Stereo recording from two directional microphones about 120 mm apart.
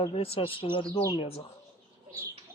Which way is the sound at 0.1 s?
50° left (ahead or behind).